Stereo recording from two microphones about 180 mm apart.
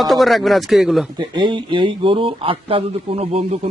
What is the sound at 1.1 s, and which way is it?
A man's voice, 25° right (ahead or behind).